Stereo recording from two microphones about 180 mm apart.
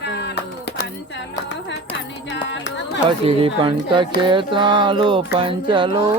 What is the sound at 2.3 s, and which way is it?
Music, 85° left.